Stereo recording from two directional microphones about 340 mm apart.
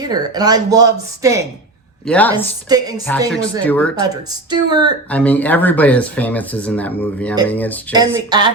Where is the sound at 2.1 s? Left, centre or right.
Centre.